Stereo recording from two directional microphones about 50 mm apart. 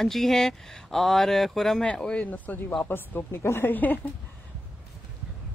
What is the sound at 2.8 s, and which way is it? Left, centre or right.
Speech, left.